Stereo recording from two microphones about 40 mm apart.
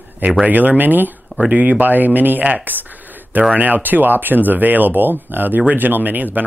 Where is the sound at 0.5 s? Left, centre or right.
Right.